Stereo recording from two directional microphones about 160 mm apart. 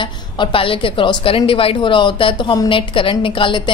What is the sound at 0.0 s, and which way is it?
A woman's voice, 30° left (ahead or behind).